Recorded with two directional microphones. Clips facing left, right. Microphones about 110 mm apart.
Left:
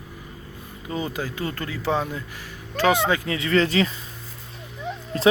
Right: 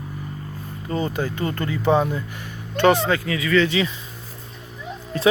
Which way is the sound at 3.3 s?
30° left (ahead or behind).